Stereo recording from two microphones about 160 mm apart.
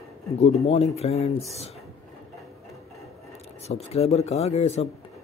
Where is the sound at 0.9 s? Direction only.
40° left (ahead or behind).